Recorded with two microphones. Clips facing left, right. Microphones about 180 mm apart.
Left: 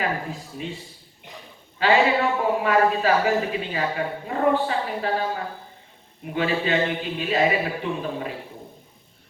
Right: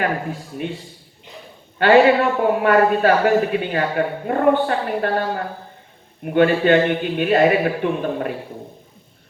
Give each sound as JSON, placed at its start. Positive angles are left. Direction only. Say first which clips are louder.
{"t": 0.0, "sound": "a man's voice", "louder": "right 4 dB", "side_deg": -60}
{"t": 1.8, "sound": "a man's voice", "louder": "right 7 dB", "side_deg": -60}